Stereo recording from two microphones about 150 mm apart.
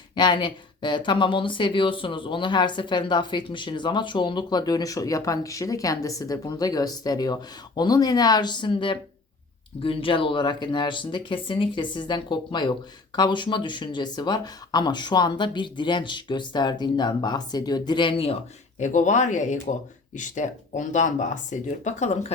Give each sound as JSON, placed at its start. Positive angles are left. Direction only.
{"t": 0.2, "sound": "speech", "side_deg": 30}
{"t": 18.8, "sound": "speech", "side_deg": 55}